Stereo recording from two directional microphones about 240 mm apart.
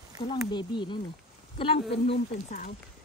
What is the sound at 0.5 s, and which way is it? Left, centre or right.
A woman's voice, centre.